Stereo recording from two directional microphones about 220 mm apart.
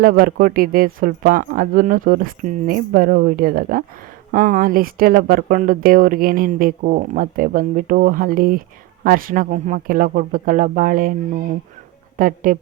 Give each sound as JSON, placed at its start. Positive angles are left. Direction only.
{"t": 0.0, "sound": "speech", "side_deg": -40}
{"t": 12.1, "sound": "speech", "side_deg": -40}